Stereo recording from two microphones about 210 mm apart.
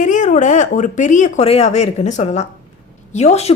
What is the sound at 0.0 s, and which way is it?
A woman's voice, 35° left (ahead or behind).